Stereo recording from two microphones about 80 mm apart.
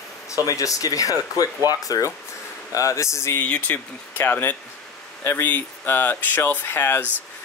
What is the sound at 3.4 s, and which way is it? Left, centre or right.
Speech, left.